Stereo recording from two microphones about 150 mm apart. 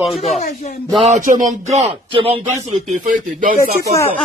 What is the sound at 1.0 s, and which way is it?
Speech, 55° right (ahead or behind).